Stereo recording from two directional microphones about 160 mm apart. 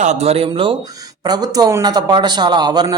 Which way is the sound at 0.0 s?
45° right (ahead or behind).